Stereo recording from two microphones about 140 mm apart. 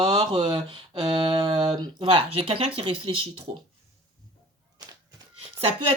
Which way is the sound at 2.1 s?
45° right (ahead or behind).